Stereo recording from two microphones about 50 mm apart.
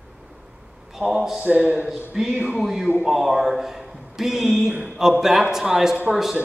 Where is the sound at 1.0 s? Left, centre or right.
Right.